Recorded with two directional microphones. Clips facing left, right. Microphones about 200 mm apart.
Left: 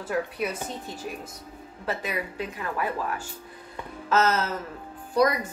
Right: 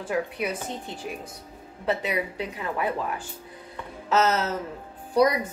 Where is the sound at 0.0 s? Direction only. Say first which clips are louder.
Right 1 dB; 15° right (ahead or behind).